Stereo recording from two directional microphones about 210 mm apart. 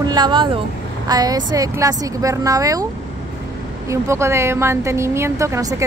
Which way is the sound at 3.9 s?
15° right (ahead or behind).